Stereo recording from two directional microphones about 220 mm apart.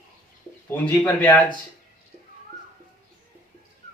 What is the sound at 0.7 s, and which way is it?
Speech, 10° left (ahead or behind).